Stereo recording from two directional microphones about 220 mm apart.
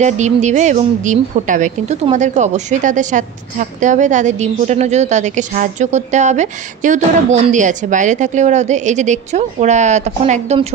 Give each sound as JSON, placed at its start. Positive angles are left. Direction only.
{"t": 0.0, "sound": "a woman's voice", "side_deg": -30}